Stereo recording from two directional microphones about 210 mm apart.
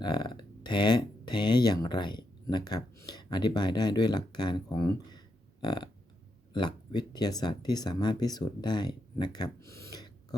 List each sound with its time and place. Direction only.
0.0 s speech: 20° left (ahead or behind)